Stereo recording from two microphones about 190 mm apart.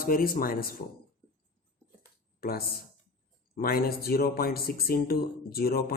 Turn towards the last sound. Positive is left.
turn(degrees=50)  # may be behind; listen again after turning